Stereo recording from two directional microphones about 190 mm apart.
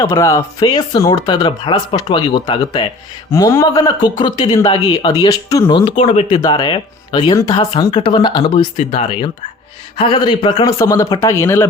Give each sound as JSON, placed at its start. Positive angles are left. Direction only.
{"t": 0.0, "sound": "a man's voice", "side_deg": 15}